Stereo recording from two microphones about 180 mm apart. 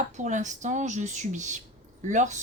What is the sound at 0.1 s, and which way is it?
Speech, 40° right (ahead or behind).